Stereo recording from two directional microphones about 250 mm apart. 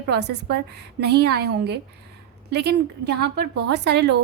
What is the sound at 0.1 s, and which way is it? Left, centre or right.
A woman's voice, right.